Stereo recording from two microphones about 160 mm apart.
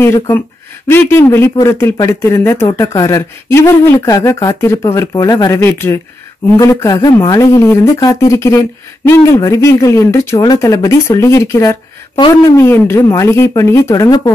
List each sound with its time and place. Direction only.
0.0 s speech: 15° left (ahead or behind)